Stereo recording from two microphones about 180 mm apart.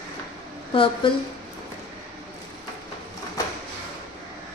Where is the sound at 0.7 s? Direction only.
30° left (ahead or behind).